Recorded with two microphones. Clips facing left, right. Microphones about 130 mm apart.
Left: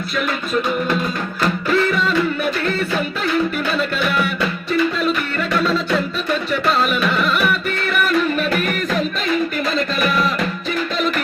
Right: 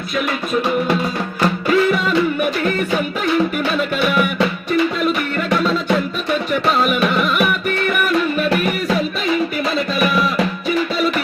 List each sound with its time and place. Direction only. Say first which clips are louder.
1.6 s music: right 2 dB; 10° right (ahead or behind)
5.5 s music: right 1 dB; 10° right (ahead or behind)